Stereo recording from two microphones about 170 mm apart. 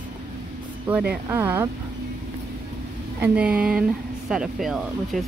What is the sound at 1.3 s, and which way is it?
Speech, 15° right (ahead or behind).